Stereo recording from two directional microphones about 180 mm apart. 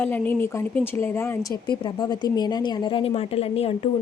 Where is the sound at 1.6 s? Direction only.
25° left (ahead or behind).